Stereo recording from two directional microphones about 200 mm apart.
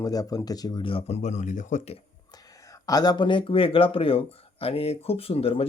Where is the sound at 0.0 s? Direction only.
20° left (ahead or behind); by 2.0 s 35° left (ahead or behind).